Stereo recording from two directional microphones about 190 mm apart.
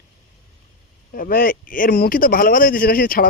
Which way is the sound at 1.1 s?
50° left (ahead or behind).